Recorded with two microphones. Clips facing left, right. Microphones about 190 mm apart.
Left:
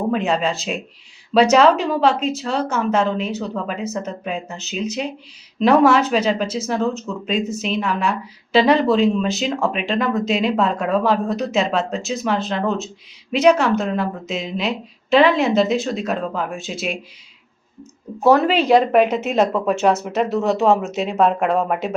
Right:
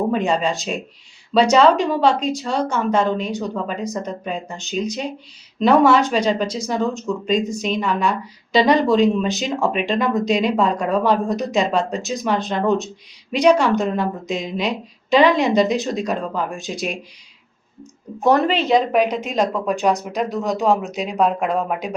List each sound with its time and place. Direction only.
0.1 s speech: 5° left (ahead or behind)
18.2 s speech: 5° left (ahead or behind)